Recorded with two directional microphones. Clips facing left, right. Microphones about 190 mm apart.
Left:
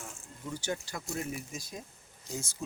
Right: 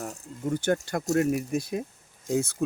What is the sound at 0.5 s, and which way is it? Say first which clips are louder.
Speech: right 10 dB; 55° right (ahead or behind).